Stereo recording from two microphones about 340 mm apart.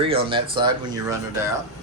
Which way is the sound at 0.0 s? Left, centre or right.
Centre.